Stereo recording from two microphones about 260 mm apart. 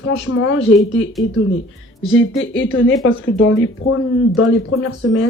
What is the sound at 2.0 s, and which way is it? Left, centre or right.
Speech, left.